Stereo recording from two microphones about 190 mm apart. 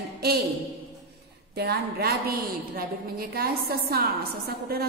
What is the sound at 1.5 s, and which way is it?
A woman's voice, 55° right (ahead or behind).